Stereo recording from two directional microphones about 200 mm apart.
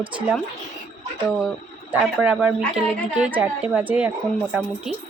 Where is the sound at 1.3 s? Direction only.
5° right (ahead or behind).